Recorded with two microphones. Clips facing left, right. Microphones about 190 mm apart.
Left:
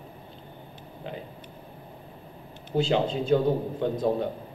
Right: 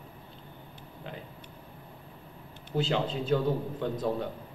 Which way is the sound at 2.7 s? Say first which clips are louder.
Left 5 dB; 20° left (ahead or behind).